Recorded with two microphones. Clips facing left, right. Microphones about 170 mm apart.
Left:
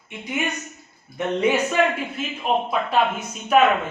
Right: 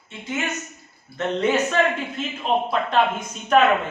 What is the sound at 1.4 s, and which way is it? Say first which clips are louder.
A man's voice: left 1 dB; 10° left (ahead or behind).